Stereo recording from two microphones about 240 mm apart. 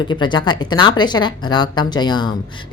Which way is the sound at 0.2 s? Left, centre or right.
Centre.